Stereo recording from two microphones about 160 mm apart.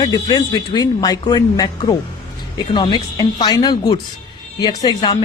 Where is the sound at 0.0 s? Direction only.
25° left (ahead or behind).